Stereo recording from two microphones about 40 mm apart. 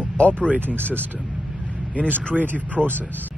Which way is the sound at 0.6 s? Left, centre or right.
Right.